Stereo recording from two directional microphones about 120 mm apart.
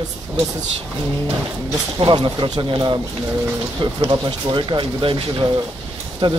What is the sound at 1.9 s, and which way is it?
Speech, 40° right (ahead or behind).